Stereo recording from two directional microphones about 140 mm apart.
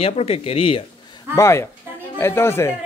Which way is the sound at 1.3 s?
20° left (ahead or behind).